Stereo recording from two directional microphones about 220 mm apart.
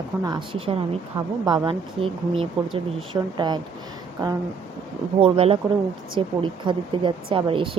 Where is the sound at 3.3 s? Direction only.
20° right (ahead or behind).